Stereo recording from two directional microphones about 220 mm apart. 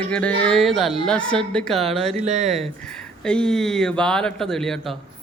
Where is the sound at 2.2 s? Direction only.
30° right (ahead or behind).